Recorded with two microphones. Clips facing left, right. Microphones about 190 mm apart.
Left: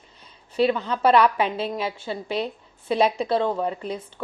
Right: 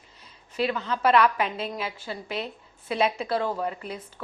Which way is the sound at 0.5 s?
30° left (ahead or behind).